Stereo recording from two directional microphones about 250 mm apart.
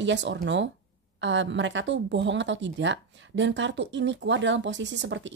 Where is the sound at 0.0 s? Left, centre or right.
Right.